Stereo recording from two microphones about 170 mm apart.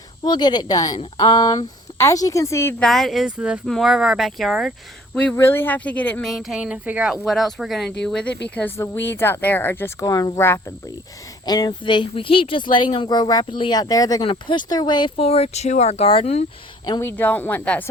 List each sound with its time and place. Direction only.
0.3 s speech: 25° left (ahead or behind)
2.8 s speech: centre (ahead or behind)
5.1 s speech: 10° left (ahead or behind)
6.3 s speech: 5° right (ahead or behind); by 15.1 s 25° left (ahead or behind)
15.1 s speech: 35° left (ahead or behind)
16.8 s speech: 20° left (ahead or behind)